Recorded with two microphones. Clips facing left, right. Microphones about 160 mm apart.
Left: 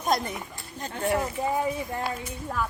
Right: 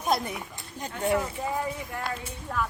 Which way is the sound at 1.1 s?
25° left (ahead or behind).